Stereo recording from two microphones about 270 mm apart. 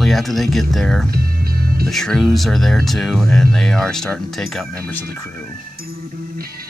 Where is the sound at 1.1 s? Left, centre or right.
Right.